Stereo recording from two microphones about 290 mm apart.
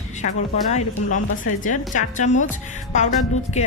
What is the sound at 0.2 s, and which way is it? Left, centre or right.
A woman's voice, left.